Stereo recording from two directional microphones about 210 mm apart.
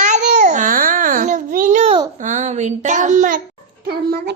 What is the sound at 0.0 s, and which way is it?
Babbling, 35° right (ahead or behind).